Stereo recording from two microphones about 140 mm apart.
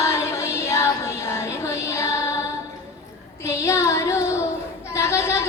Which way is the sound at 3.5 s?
20° left (ahead or behind).